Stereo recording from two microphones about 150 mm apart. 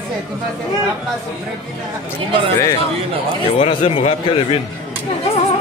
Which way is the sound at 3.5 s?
40° left (ahead or behind).